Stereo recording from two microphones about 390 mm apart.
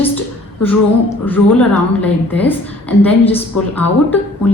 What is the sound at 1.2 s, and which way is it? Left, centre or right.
A woman's voice, centre.